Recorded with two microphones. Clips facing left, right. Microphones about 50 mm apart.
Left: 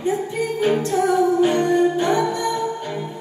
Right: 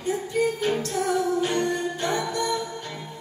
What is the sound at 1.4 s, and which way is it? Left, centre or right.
Music, centre.